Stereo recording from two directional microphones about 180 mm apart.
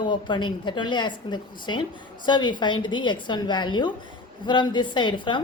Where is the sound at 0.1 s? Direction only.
25° left (ahead or behind).